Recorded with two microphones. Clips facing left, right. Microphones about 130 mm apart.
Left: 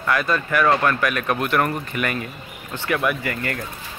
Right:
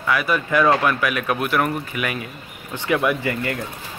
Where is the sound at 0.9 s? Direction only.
10° right (ahead or behind).